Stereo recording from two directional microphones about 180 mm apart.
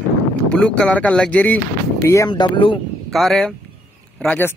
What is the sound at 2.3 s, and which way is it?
Speech, 30° left (ahead or behind).